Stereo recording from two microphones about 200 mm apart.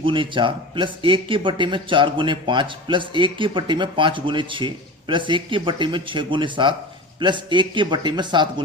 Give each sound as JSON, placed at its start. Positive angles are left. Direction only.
{"t": 0.0, "sound": "speech", "side_deg": -25}